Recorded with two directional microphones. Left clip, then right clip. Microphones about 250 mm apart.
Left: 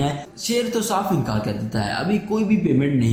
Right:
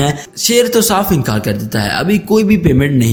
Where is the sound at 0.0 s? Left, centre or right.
Right.